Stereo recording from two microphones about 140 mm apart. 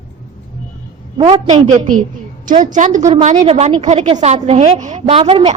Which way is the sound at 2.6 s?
65° right (ahead or behind).